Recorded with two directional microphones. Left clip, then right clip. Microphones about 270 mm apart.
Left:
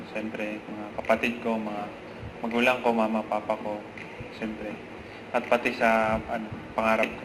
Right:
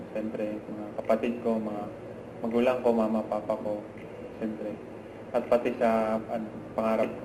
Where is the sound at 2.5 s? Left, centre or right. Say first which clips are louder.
Left 1 dB; centre.